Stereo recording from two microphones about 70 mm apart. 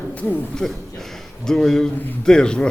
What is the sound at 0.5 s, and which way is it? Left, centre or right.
A man's voice, centre.